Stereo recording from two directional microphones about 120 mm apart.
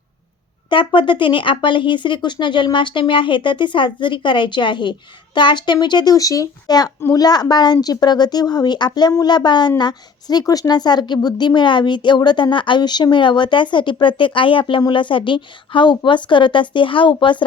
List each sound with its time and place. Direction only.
0.7 s speech: 45° left (ahead or behind)